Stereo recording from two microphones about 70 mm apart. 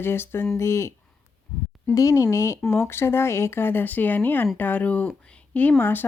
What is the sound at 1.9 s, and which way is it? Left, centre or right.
Speech, left.